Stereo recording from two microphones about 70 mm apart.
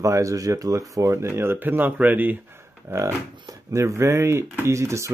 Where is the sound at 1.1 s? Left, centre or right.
Right.